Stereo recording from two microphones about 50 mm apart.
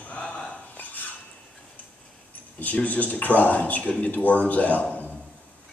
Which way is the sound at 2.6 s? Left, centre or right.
Left.